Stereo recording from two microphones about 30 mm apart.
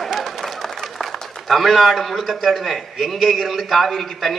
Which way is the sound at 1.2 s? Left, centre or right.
Centre.